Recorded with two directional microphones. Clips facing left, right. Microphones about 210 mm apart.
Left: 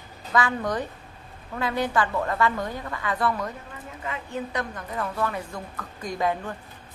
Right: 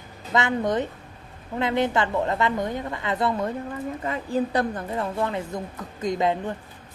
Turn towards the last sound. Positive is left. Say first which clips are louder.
# right 3 dB
turn(degrees=-20)  # may be behind; listen again after turning